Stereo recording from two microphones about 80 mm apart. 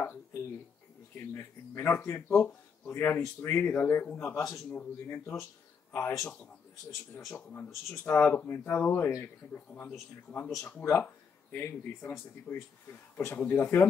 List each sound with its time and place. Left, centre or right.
0.0 s speech: left
7.3 s speech: left
12.5 s speech: centre
13.2 s speech: left